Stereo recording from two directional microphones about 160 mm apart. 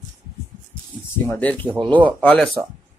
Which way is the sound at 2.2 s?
5° left (ahead or behind).